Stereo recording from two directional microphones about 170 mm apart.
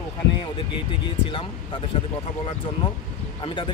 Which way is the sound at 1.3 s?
30° left (ahead or behind).